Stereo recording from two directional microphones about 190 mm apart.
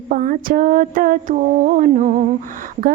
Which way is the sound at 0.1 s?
45° right (ahead or behind).